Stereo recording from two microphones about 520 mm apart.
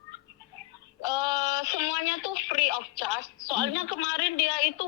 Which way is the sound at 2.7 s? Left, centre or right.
Left.